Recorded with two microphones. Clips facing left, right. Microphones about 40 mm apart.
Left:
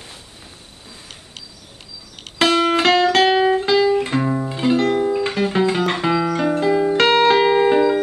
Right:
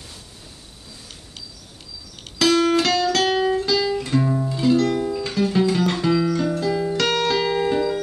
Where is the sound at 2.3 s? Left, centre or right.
Left.